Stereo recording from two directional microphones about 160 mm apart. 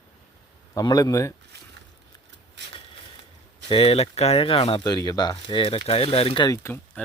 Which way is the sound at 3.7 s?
35° left (ahead or behind).